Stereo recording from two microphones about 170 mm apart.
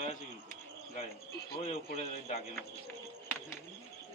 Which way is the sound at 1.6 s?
40° left (ahead or behind).